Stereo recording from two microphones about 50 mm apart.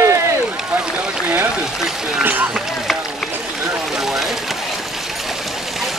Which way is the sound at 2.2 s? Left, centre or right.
Right.